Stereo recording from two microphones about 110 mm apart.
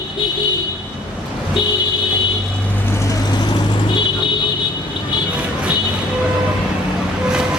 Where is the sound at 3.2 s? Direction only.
40° left (ahead or behind).